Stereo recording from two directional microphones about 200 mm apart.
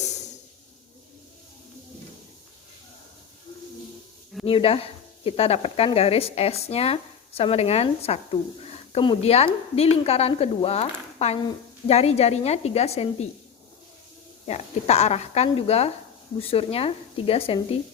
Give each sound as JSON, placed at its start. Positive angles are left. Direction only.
{"t": 4.4, "sound": "speech", "side_deg": 30}
{"t": 14.4, "sound": "speech", "side_deg": 35}